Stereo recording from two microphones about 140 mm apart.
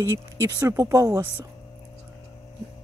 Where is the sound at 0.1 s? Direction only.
20° right (ahead or behind).